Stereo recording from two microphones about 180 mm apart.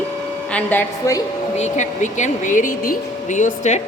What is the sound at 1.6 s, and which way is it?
Speech, 40° left (ahead or behind).